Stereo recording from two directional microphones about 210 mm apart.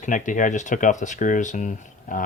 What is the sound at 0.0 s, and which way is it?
Speech, 35° left (ahead or behind).